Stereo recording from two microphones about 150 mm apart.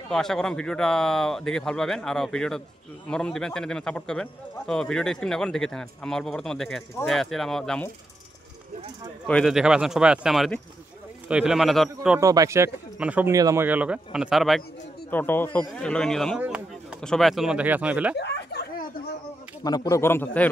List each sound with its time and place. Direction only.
0.1 s a man's voice: 5° left (ahead or behind)
9.3 s a man's voice: centre (ahead or behind)
12.2 s speech: 20° right (ahead or behind)
13.3 s speech: 20° right (ahead or behind)
13.7 s speech: 10° right (ahead or behind)
15.0 s a man's voice: 15° left (ahead or behind)
16.3 s chop: 5° right (ahead or behind)
17.0 s speech: 5° left (ahead or behind)
18.5 s a sound: 90° left
19.6 s speech: 25° left (ahead or behind)
20.0 s a man's voice: 15° left (ahead or behind)